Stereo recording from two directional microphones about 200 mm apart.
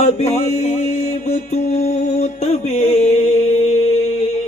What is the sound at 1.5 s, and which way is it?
Mantra, 35° left (ahead or behind).